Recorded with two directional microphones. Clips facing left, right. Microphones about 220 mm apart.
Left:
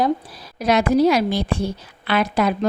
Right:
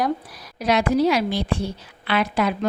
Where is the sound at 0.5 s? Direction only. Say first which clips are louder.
Left 3 dB; 45° left (ahead or behind).